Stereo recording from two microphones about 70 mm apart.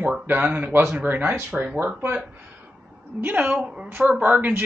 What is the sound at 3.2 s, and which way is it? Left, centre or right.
Speech, right.